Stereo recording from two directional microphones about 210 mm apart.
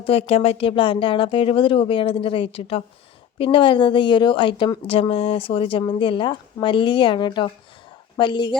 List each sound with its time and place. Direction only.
0.0 s a woman's voice: 30° left (ahead or behind)